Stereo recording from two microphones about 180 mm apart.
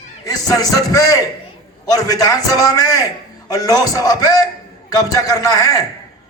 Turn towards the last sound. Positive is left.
turn(degrees=20)  # may be behind; listen again after turning